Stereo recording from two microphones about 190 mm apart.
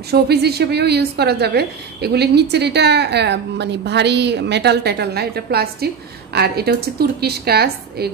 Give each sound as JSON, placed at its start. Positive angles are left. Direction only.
{"t": 0.1, "sound": "a woman's voice", "side_deg": -60}